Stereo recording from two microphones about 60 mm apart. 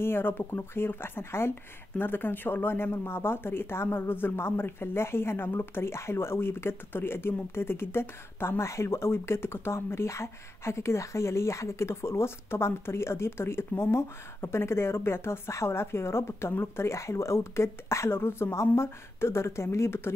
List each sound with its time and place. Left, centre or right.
0.0 s speech: left